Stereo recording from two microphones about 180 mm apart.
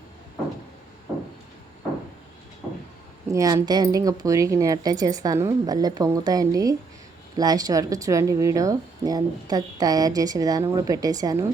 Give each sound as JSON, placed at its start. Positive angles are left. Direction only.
{"t": 3.2, "sound": "speech", "side_deg": -20}